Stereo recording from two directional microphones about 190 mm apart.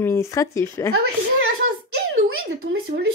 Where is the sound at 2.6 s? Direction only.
60° right (ahead or behind).